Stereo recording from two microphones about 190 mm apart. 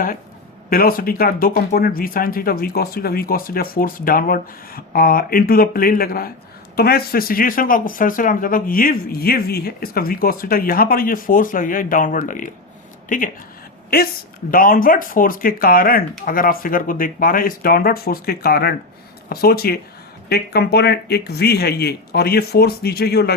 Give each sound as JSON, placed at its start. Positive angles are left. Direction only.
{"t": 0.7, "sound": "speech", "side_deg": 50}
{"t": 14.5, "sound": "speech", "side_deg": 45}